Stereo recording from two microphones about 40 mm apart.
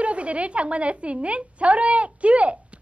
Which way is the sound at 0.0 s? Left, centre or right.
Right.